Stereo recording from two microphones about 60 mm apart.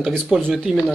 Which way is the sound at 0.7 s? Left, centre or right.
Centre.